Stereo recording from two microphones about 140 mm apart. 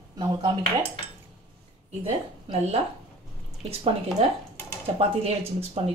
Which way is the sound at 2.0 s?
45° right (ahead or behind).